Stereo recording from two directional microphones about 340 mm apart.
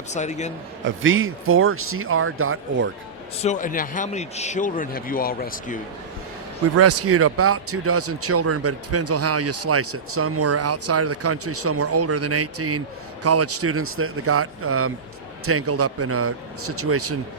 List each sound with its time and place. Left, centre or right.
0.1 s a man's voice: centre
0.9 s a man's voice: right
3.4 s a man's voice: left
6.7 s a man's voice: right